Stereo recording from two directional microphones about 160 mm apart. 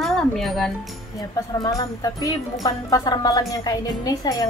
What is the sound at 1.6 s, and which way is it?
A woman's voice, 25° left (ahead or behind).